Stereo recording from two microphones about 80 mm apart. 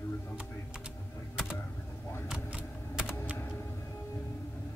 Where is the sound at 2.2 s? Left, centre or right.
Centre.